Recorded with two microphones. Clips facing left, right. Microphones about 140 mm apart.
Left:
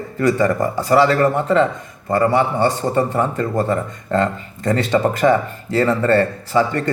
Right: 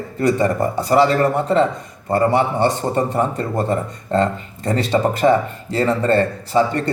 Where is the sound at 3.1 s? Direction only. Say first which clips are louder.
Left 1 dB; 30° right (ahead or behind).